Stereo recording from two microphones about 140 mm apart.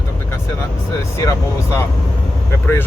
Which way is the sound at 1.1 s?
20° left (ahead or behind).